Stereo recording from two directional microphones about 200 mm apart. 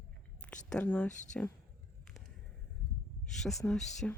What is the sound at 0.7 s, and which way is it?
Speech, 5° left (ahead or behind).